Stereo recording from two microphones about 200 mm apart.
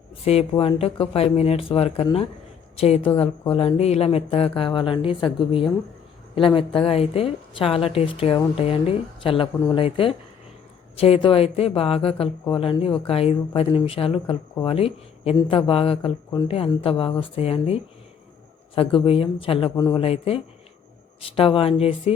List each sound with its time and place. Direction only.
0.3 s speech: 30° left (ahead or behind)
20.0 s speech: 30° left (ahead or behind)